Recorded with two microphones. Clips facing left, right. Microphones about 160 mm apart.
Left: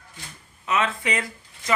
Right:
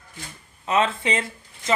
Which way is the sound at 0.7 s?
30° right (ahead or behind).